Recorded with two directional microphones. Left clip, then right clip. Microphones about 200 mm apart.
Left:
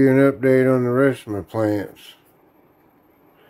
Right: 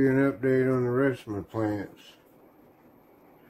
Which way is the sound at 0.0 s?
45° left (ahead or behind).